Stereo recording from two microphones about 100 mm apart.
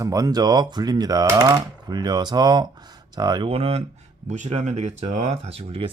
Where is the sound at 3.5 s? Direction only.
85° right.